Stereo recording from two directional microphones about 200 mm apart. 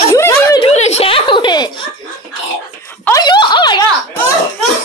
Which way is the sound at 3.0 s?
20° left (ahead or behind).